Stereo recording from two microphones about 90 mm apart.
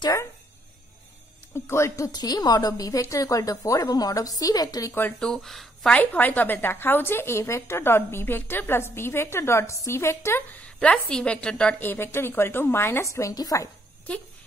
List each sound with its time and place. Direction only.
1.5 s a woman's voice: 30° left (ahead or behind)
5.2 s speech: 5° left (ahead or behind)
5.9 s speech: 15° left (ahead or behind)
10.6 s a woman's voice: 10° left (ahead or behind)
11.8 s speech: 25° left (ahead or behind); by 13.7 s 40° left (ahead or behind)